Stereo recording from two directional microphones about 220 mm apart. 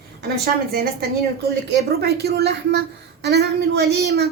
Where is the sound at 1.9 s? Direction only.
45° right (ahead or behind).